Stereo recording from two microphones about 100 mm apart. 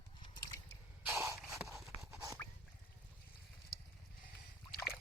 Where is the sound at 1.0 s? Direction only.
25° right (ahead or behind).